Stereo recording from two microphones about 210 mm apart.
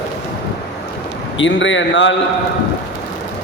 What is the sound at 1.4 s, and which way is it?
Speech, 60° left (ahead or behind).